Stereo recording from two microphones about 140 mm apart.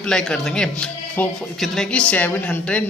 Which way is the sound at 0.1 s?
5° left (ahead or behind).